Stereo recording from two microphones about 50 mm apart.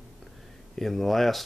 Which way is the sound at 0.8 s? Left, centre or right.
Centre.